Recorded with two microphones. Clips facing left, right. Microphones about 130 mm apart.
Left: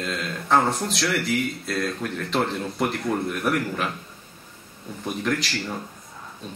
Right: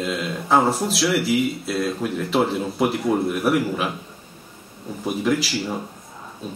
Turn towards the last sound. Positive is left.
turn(degrees=-5)  # may be behind; listen again after turning